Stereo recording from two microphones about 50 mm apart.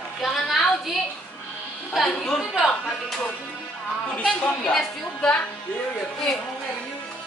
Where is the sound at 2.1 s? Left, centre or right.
Centre.